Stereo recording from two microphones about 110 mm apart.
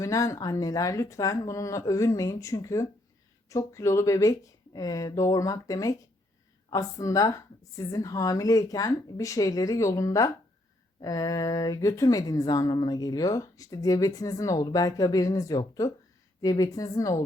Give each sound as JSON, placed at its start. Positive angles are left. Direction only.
{"t": 0.0, "sound": "speech", "side_deg": 30}